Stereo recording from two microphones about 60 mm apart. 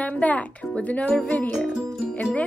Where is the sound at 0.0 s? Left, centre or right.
Left.